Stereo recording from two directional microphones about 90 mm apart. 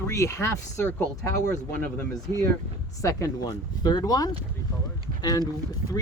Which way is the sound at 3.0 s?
35° left (ahead or behind).